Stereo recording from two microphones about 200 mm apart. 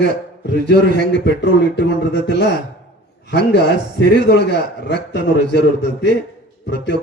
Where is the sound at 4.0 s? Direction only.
55° left (ahead or behind).